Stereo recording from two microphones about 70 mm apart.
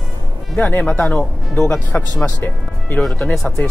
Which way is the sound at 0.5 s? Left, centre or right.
Left.